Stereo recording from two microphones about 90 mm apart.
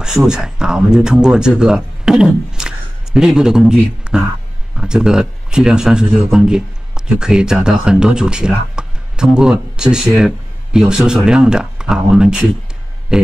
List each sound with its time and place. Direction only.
0.0 s speech: 5° right (ahead or behind)